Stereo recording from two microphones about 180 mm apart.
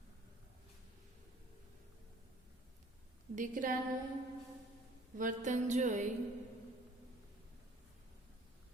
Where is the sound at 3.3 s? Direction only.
45° right (ahead or behind).